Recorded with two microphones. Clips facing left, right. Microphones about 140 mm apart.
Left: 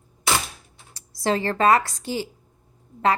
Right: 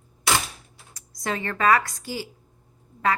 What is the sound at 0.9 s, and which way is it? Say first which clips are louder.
A woman's voice: left 6 dB; 30° left (ahead or behind).